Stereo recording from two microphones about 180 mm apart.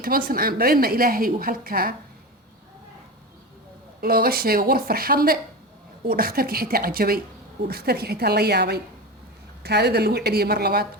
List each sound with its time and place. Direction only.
0.3 s a woman's voice: 55° right (ahead or behind)
4.0 s a woman's voice: 55° right (ahead or behind)